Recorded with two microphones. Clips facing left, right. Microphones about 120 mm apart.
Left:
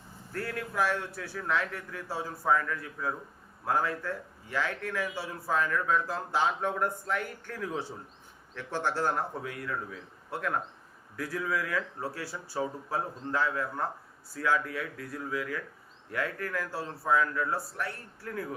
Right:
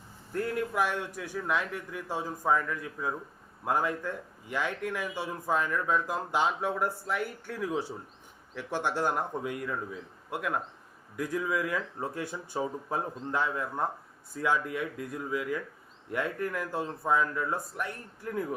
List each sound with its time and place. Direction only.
0.3 s speech: 20° right (ahead or behind)